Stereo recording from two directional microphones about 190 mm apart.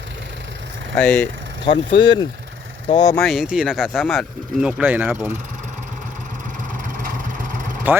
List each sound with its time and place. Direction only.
0.9 s speech: 5° left (ahead or behind)
1.6 s speech: 25° left (ahead or behind)
3.2 s speech: centre (ahead or behind)
7.9 s speech: 10° right (ahead or behind)